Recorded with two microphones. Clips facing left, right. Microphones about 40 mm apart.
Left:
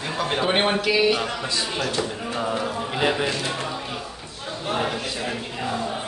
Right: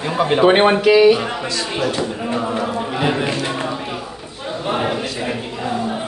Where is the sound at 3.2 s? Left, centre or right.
Right.